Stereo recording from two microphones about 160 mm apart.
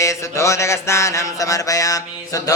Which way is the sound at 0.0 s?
20° left (ahead or behind).